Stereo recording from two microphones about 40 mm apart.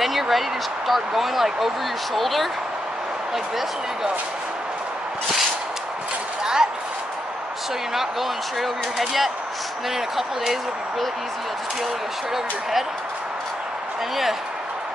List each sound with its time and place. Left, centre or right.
0.0 s speech: centre
6.4 s a sound: centre
7.9 s speech: centre